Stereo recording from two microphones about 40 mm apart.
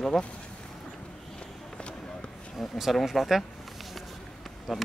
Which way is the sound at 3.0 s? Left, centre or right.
Centre.